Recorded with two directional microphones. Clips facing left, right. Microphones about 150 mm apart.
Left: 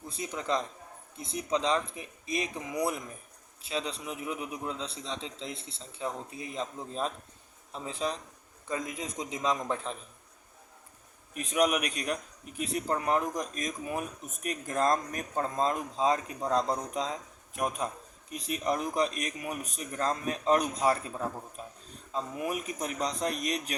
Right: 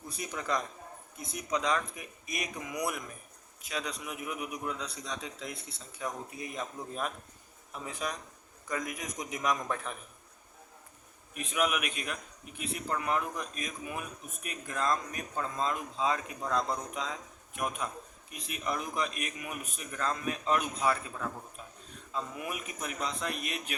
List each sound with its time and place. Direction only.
0.1 s a man's voice: 25° left (ahead or behind)
11.3 s speech: 40° left (ahead or behind)
21.6 s a sound: 35° left (ahead or behind)
22.1 s speech: 35° left (ahead or behind)